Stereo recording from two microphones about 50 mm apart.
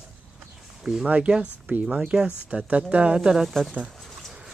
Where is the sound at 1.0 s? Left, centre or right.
Right.